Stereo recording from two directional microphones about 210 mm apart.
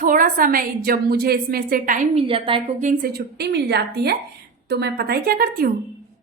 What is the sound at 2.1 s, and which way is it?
Speech, 25° right (ahead or behind).